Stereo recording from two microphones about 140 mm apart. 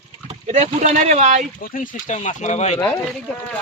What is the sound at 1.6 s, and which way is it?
Speech, 75° left (ahead or behind).